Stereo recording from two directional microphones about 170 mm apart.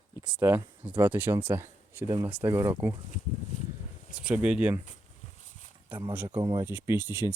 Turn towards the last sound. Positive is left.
turn(degrees=-15)  # may be behind; listen again after turning